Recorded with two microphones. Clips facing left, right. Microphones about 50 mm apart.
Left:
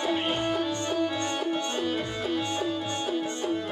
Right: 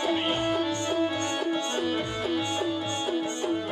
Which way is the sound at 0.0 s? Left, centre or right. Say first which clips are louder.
Right 1 dB; centre.